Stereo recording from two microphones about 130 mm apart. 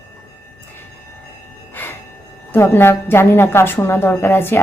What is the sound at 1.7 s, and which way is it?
Music, 15° left (ahead or behind).